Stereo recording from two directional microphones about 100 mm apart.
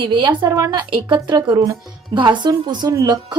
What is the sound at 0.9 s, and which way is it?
A woman's voice, 50° right (ahead or behind).